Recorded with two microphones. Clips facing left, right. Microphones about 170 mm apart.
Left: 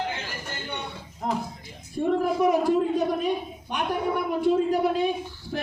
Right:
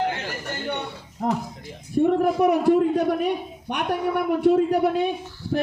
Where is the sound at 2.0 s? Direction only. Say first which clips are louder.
Right 4 dB; 60° right (ahead or behind).